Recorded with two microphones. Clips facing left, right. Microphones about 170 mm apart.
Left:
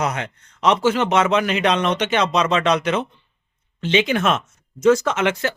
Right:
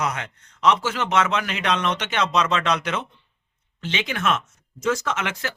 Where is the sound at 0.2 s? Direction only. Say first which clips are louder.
Left 2 dB; 20° left (ahead or behind).